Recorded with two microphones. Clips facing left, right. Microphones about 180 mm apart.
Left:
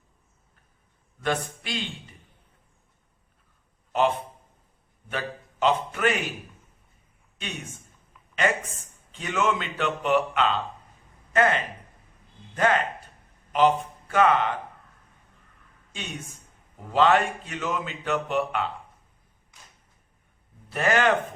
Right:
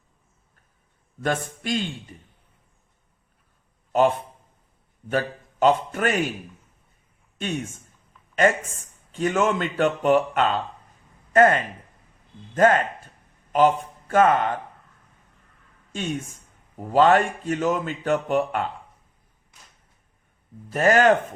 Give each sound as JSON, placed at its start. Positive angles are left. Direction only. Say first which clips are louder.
{"t": 1.2, "sound": "a man's voice", "louder": "right 2 dB", "side_deg": -45}
{"t": 5.1, "sound": "a man's voice", "louder": "right 7 dB", "side_deg": -45}
{"t": 9.1, "sound": "a man's voice", "louder": "right 4 dB", "side_deg": -45}
{"t": 15.9, "sound": "a man's voice", "louder": "right 9 dB", "side_deg": -45}
{"t": 20.7, "sound": "speech", "louder": "right 5 dB", "side_deg": -40}